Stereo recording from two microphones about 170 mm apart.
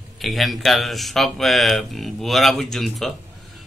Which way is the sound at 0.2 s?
Centre (ahead or behind).